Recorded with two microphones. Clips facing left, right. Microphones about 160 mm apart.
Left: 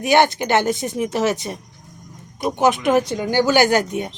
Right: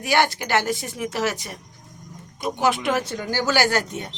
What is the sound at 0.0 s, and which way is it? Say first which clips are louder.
Speech: left 5 dB; 20° left (ahead or behind).